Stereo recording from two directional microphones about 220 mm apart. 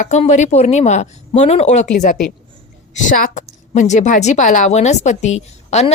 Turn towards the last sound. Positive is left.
turn(degrees=30)  # may be behind; listen again after turning